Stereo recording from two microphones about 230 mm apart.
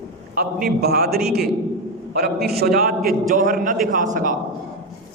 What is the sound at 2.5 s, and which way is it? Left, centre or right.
A man's voice, right.